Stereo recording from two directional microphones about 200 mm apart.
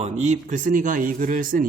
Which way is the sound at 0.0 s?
35° right (ahead or behind).